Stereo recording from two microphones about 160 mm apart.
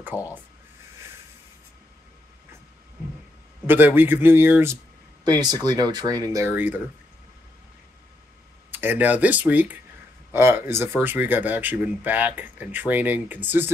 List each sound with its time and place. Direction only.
0.0 s speech: 10° right (ahead or behind)
3.6 s speech: 10° right (ahead or behind)
5.2 s speech: 25° right (ahead or behind)
8.7 s speech: 10° right (ahead or behind)